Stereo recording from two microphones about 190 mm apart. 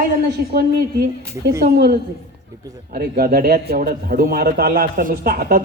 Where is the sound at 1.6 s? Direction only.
60° right (ahead or behind).